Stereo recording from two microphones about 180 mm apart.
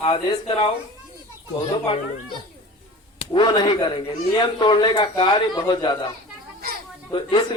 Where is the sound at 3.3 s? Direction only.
25° left (ahead or behind).